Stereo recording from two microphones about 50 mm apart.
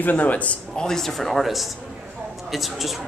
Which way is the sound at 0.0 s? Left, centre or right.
Left.